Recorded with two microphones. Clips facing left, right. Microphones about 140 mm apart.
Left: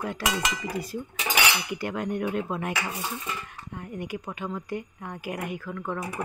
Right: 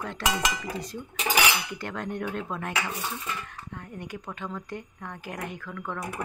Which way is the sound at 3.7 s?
10° left (ahead or behind).